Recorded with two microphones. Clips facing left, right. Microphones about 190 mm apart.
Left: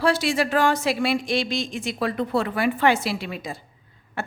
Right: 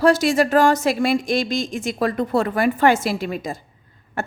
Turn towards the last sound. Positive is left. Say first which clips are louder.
# right 4 dB
turn(degrees=-45)  # may be behind; listen again after turning